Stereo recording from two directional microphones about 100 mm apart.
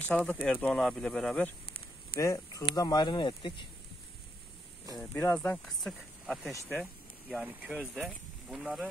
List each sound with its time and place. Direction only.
0.1 s speech: 5° left (ahead or behind)
0.7 s speech: 5° left (ahead or behind)
2.1 s speech: 35° left (ahead or behind); by 3.6 s 55° left (ahead or behind)
5.1 s speech: 20° left (ahead or behind)
5.7 s speech: 5° left (ahead or behind)
6.7 s a sound: 5° right (ahead or behind)
7.4 s speech: 15° right (ahead or behind)